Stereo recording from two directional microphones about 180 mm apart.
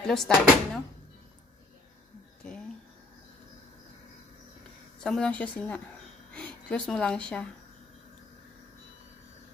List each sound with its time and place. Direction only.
0.0 s speech: centre (ahead or behind)
5.0 s speech: 5° left (ahead or behind)